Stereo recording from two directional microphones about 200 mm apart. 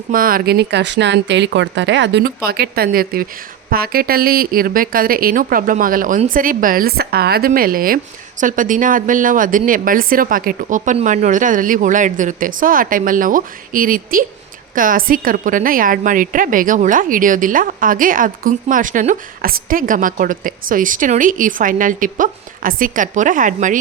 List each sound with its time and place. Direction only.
0.1 s a woman's voice: 45° right (ahead or behind)